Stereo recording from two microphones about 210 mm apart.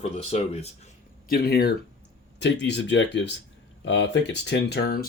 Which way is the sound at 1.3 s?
45° left (ahead or behind).